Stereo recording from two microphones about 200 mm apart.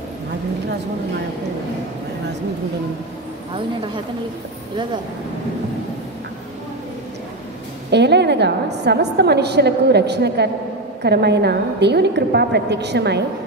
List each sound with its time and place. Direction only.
7.9 s a woman's voice: 60° right (ahead or behind)